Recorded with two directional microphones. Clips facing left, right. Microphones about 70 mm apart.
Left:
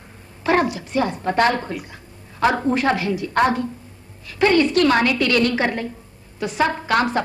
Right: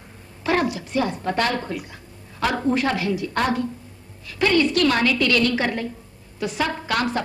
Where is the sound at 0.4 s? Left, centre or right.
Left.